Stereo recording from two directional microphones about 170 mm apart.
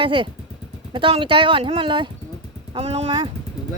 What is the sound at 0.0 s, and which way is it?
Speech, 30° right (ahead or behind).